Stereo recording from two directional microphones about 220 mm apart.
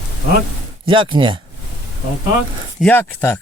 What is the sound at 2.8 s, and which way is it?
Speech, 5° left (ahead or behind).